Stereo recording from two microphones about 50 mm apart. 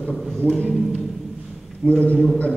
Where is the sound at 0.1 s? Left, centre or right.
Centre.